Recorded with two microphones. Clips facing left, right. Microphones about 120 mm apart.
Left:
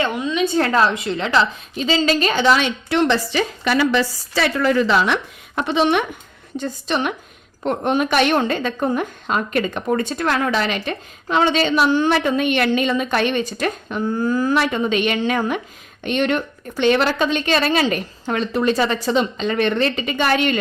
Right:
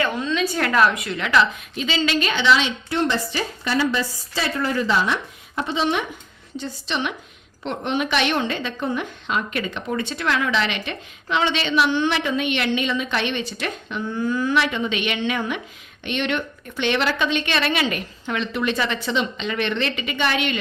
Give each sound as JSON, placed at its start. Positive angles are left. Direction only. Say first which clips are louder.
{"t": 0.0, "sound": "a sound", "louder": "left 2 dB", "side_deg": 15}
{"t": 0.4, "sound": "a woman's voice", "louder": "left 2 dB", "side_deg": 30}
{"t": 2.9, "sound": "a woman's voice", "louder": "left 5 dB", "side_deg": 90}
{"t": 6.6, "sound": "a woman's voice", "louder": "left 5 dB", "side_deg": 50}